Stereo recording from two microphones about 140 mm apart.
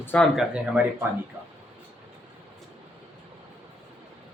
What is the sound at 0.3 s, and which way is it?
Speech, 10° right (ahead or behind).